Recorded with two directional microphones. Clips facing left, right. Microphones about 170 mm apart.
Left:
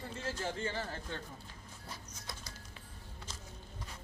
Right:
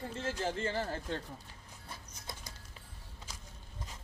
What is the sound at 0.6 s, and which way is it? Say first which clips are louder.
Speech: right 4 dB; 35° right (ahead or behind).